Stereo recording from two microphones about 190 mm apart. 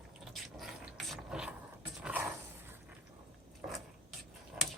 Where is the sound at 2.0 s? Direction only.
10° right (ahead or behind).